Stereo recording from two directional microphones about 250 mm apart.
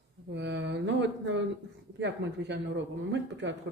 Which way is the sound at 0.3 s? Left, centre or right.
Right.